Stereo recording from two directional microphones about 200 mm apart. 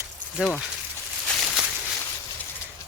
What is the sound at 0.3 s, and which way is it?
Speech, centre (ahead or behind).